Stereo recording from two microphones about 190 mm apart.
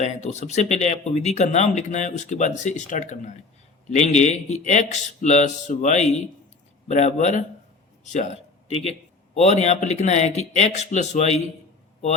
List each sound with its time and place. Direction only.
0.0 s a man's voice: 40° left (ahead or behind)